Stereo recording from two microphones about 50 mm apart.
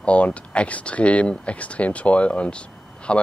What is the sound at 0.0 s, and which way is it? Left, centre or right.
Speech, left.